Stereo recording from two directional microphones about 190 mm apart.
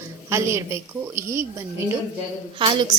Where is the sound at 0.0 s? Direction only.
15° right (ahead or behind).